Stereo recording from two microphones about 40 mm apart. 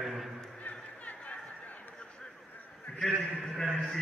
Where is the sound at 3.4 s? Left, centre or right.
Centre.